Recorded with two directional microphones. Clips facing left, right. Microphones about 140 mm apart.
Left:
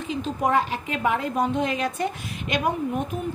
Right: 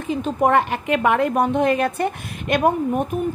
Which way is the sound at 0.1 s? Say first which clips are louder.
Right 5 dB; 55° right (ahead or behind).